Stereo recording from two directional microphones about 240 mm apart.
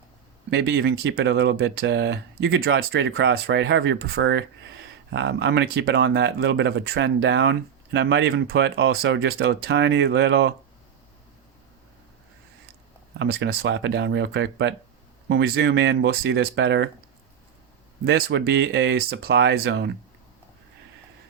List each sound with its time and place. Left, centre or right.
0.5 s speech: right
13.1 s speech: right
18.0 s speech: right